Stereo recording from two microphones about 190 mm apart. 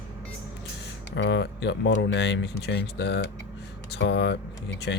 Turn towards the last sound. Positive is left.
turn(degrees=65)  # may be behind; listen again after turning